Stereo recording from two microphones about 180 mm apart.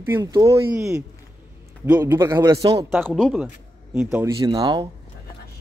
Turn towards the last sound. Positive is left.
turn(degrees=-25)  # may be behind; listen again after turning